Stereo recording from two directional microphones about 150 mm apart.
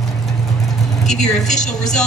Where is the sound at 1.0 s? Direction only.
50° left (ahead or behind).